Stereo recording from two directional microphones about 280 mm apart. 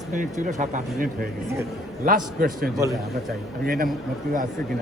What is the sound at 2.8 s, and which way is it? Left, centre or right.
Speech, centre.